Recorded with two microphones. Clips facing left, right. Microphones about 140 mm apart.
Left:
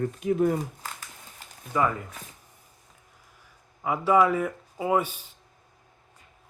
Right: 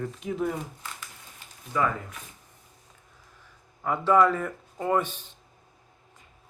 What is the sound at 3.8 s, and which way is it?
Speech, 10° left (ahead or behind).